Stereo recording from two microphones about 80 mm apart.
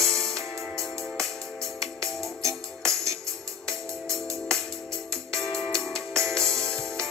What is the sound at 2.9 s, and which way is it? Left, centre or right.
Music, right.